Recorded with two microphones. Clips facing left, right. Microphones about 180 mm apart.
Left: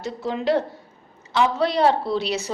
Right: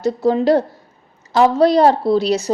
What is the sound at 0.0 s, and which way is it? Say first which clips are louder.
Speech: right 9 dB; 40° right (ahead or behind).